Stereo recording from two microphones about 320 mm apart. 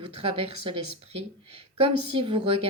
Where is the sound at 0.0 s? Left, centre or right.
Centre.